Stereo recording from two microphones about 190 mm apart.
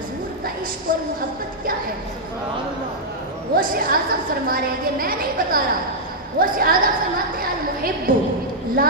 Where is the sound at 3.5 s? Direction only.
50° right (ahead or behind).